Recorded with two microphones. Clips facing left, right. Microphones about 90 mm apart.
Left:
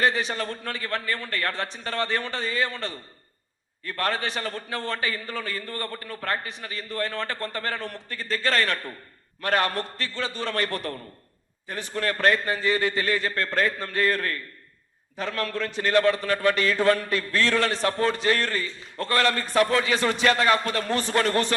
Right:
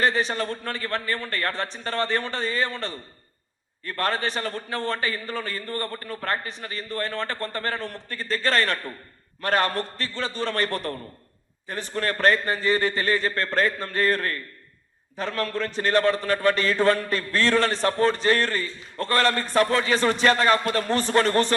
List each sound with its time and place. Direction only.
0.0 s a man's voice: 35° right (ahead or behind)